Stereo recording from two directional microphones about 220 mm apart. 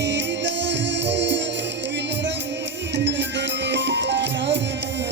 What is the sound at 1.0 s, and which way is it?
Music, 55° right (ahead or behind).